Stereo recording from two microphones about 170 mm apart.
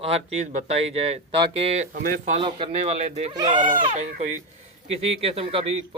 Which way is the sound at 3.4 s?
30° right (ahead or behind).